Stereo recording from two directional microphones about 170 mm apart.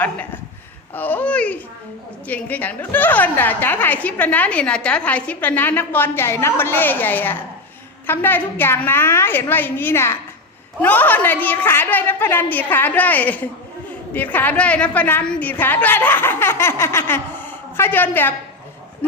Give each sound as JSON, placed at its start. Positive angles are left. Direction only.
{"t": 0.9, "sound": "a woman's voice", "side_deg": 10}